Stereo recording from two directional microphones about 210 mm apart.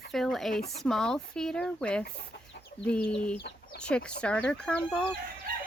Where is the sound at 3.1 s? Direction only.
5° left (ahead or behind).